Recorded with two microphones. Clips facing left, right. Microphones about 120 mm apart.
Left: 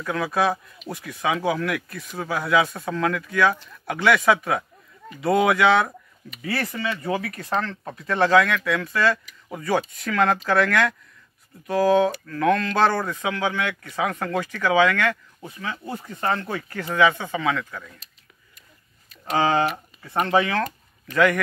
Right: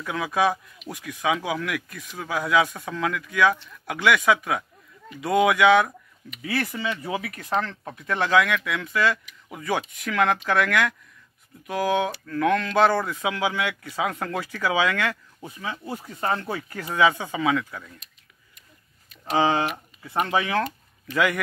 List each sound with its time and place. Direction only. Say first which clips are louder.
0.0 s speech: left 1 dB; 10° right (ahead or behind)
6.7 s speech: left 1 dB; 20° right (ahead or behind)
7.0 s speech: left 3 dB; 5° right (ahead or behind)
20.1 s speech: left 3 dB; 5° right (ahead or behind)